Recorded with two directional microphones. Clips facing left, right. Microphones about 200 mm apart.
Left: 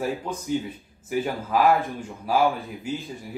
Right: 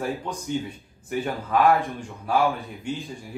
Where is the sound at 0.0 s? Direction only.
5° left (ahead or behind).